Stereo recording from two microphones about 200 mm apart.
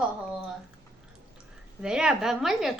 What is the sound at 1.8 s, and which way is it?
Speech, 5° right (ahead or behind).